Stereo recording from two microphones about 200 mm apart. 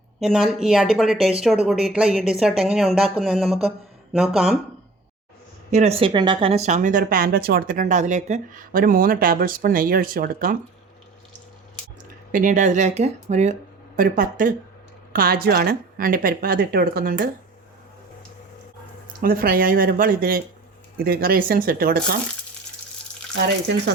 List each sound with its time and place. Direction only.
0.2 s speech: centre (ahead or behind)
5.7 s speech: 30° right (ahead or behind)
12.3 s speech: 40° right (ahead or behind)
19.2 s speech: 45° right (ahead or behind)
23.3 s speech: 65° right (ahead or behind)